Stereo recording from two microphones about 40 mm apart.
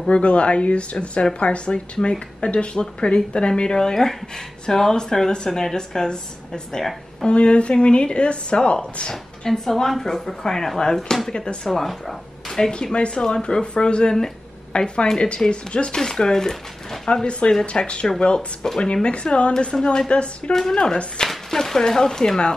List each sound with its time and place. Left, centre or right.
0.1 s a woman's voice: left
6.8 s speech: centre
7.2 s speech: left
9.5 s a woman's voice: centre
12.7 s speech: left
17.1 s speech: left
20.5 s a woman's voice: centre